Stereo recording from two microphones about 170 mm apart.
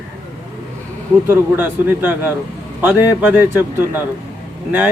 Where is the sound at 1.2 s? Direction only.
10° right (ahead or behind).